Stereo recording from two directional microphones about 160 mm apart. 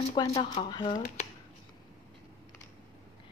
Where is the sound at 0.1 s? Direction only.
25° left (ahead or behind).